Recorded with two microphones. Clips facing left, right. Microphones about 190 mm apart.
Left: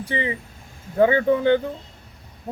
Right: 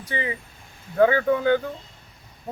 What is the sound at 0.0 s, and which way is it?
Speech, 30° left (ahead or behind).